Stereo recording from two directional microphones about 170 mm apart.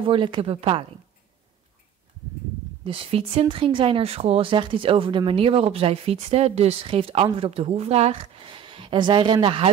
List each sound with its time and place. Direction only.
0.0 s speech: 30° right (ahead or behind)
2.8 s speech: 35° right (ahead or behind)